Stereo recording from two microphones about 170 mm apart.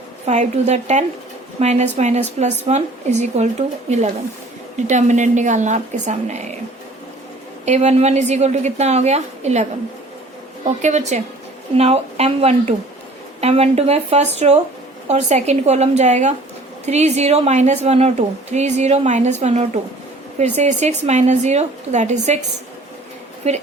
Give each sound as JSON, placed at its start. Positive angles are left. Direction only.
{"t": 0.3, "sound": "a woman's voice", "side_deg": -40}
{"t": 7.6, "sound": "a woman's voice", "side_deg": -40}
{"t": 23.4, "sound": "speech", "side_deg": -40}